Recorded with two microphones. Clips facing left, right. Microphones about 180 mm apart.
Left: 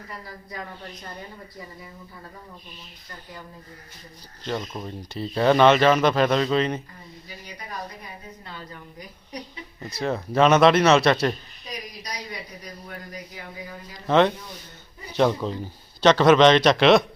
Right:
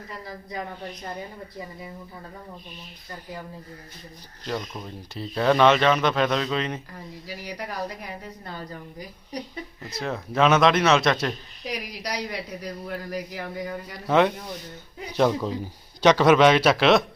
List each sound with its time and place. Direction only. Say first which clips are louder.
4.4 s speech: left 1 dB; centre (ahead or behind)
7.3 s speech: right 6 dB; 75° right (ahead or behind)
8.4 s a woman's voice: right 4 dB; 40° right (ahead or behind)
9.8 s speech: left 4 dB; centre (ahead or behind)
11.6 s speech: right 5 dB; 75° right (ahead or behind)
14.1 s speech: left 1 dB; 10° right (ahead or behind)